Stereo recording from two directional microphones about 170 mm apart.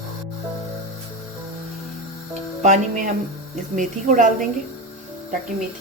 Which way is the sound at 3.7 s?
50° right (ahead or behind).